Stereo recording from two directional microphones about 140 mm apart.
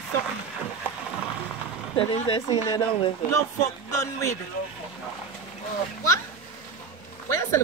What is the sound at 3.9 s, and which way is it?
Speech, 20° left (ahead or behind).